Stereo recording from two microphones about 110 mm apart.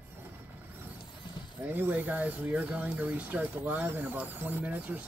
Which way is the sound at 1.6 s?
20° right (ahead or behind).